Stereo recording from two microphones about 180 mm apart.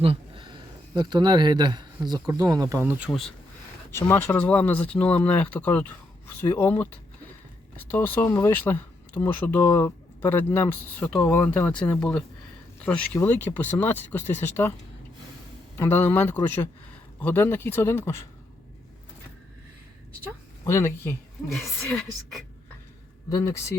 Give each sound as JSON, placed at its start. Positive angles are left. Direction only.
{"t": 0.0, "sound": "a sound", "side_deg": -30}
{"t": 0.9, "sound": "speech", "side_deg": -25}
{"t": 3.1, "sound": "speech", "side_deg": 5}
{"t": 15.8, "sound": "speech", "side_deg": 10}
{"t": 20.7, "sound": "speech", "side_deg": 15}
{"t": 23.3, "sound": "speech", "side_deg": 15}